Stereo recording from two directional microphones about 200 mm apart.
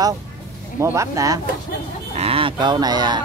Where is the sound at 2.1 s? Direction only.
30° right (ahead or behind).